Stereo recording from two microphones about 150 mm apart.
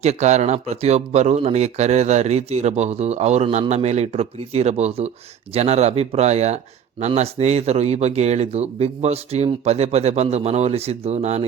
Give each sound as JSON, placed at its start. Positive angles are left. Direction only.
{"t": 0.0, "sound": "speech", "side_deg": -50}